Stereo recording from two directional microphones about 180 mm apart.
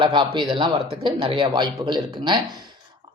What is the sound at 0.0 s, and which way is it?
Speech, 25° right (ahead or behind).